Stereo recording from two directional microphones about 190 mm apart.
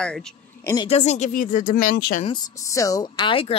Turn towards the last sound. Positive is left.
turn(degrees=30)  # may be behind; listen again after turning